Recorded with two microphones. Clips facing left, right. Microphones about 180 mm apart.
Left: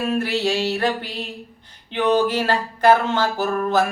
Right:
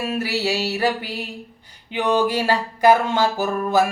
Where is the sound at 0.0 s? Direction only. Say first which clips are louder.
Left 2 dB; 10° right (ahead or behind).